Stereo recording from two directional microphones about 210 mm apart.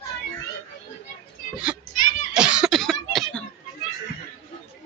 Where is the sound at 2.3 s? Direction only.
5° right (ahead or behind).